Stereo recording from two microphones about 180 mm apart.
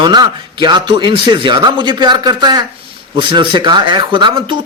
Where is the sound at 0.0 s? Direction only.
25° right (ahead or behind).